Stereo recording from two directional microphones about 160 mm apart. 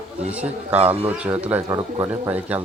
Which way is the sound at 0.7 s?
40° right (ahead or behind).